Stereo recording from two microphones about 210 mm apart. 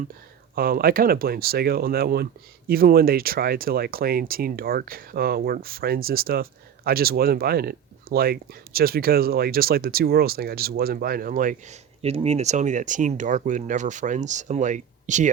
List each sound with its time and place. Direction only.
0.5 s speech: 45° right (ahead or behind)